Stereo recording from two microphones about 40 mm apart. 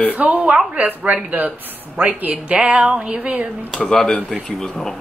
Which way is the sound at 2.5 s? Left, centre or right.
Right.